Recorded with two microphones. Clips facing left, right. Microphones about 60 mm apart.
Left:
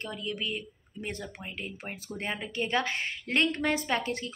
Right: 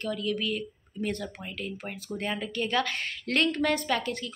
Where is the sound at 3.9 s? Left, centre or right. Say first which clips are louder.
Right 1 dB; left.